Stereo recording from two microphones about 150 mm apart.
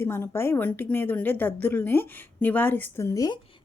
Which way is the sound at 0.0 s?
15° left (ahead or behind).